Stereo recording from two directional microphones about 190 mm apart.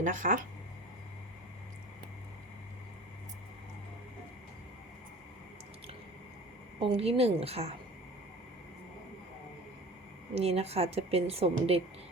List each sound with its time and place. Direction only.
0.0 s speech: 45° right (ahead or behind)
6.7 s a woman's voice: 30° right (ahead or behind)
10.3 s a woman's voice: 35° right (ahead or behind)